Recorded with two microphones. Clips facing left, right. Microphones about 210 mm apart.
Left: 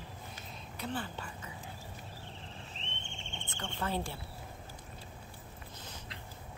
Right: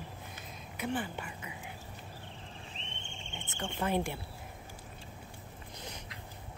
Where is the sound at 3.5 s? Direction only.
10° right (ahead or behind).